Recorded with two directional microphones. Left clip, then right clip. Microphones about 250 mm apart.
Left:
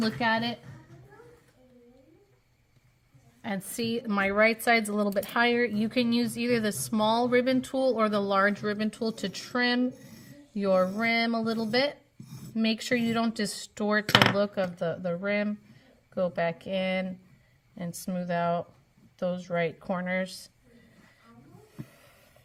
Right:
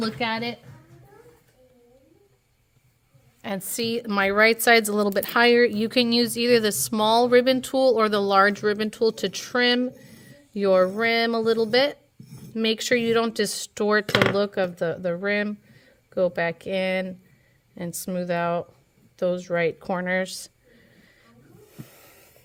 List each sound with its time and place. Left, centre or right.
0.2 s a woman's voice: right
3.4 s a woman's voice: right
21.8 s a sound: right